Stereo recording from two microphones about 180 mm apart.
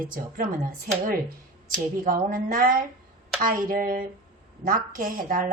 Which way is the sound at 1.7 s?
50° right (ahead or behind).